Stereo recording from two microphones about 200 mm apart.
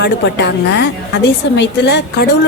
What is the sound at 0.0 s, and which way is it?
A woman's voice, 60° left (ahead or behind).